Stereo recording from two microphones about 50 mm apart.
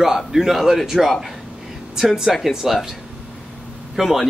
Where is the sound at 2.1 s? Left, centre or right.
Centre.